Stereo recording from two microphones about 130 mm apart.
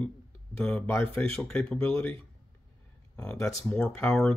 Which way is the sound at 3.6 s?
10° left (ahead or behind).